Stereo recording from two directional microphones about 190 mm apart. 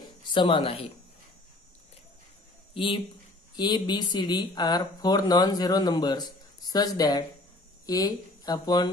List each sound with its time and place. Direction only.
0.3 s speech: 25° left (ahead or behind)
2.7 s speech: 25° left (ahead or behind)